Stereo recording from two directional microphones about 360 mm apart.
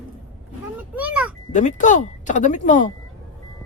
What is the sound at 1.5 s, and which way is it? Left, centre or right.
Speech, centre.